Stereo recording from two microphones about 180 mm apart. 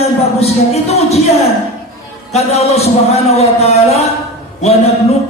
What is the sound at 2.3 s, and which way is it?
Speech, 35° left (ahead or behind).